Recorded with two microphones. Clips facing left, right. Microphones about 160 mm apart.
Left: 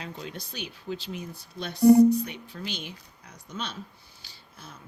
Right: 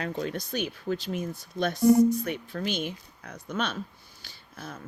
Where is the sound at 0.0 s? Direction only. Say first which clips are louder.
Right 7 dB; 50° right (ahead or behind).